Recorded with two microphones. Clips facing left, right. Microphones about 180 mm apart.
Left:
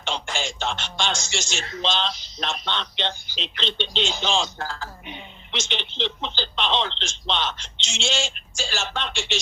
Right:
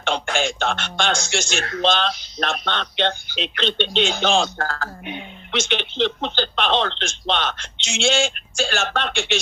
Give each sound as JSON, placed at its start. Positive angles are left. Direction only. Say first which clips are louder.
{"t": 0.0, "sound": "speech", "louder": "right 7 dB", "side_deg": -55}